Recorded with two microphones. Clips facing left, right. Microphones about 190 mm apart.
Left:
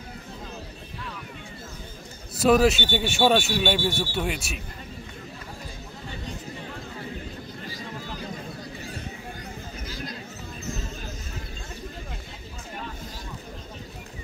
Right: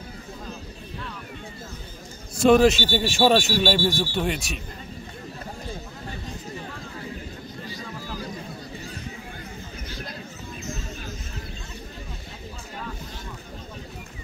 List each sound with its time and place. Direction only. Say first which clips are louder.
2.3 s speech: right 3 dB; 5° left (ahead or behind)